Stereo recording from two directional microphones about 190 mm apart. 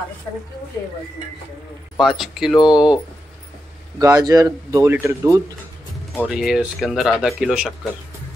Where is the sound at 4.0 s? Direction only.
20° right (ahead or behind); by 7.9 s 5° right (ahead or behind).